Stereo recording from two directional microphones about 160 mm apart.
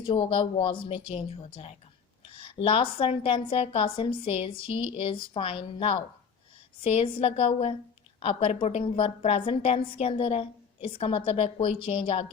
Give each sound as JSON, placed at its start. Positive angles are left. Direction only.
{"t": 0.0, "sound": "a woman's voice", "side_deg": 35}